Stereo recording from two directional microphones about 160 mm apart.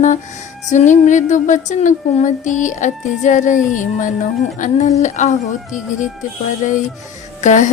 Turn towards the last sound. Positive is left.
turn(degrees=50)  # may be behind; listen again after turning